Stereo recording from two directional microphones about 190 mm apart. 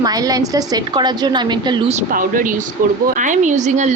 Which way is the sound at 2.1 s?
45° right (ahead or behind).